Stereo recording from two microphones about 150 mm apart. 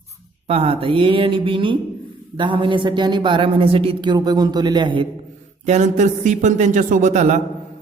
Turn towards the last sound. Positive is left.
turn(degrees=-50)  # may be behind; listen again after turning